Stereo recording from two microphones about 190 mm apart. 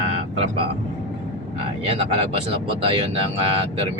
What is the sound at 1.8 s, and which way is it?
Speech, 30° right (ahead or behind).